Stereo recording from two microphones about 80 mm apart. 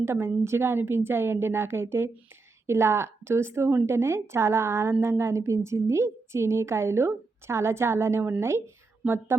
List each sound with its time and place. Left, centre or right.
0.0 s a woman's voice: right